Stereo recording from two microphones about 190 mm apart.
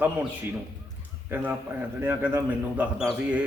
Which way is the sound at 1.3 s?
10° right (ahead or behind).